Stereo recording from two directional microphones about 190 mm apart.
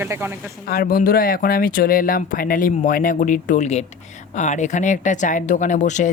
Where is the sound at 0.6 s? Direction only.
55° left (ahead or behind).